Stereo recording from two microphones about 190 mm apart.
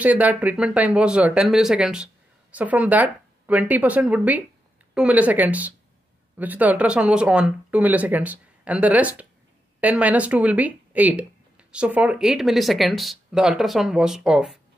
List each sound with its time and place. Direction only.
0.0 s speech: 10° right (ahead or behind)